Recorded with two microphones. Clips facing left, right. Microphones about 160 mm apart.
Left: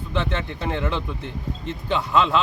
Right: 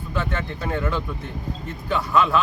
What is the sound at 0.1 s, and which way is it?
Speech, 25° left (ahead or behind).